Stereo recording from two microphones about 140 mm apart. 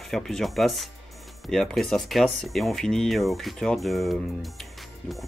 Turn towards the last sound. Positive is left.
turn(degrees=0)  # may be behind; listen again after turning